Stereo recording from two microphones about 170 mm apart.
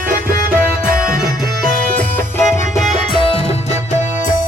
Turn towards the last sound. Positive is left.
turn(degrees=30)  # may be behind; listen again after turning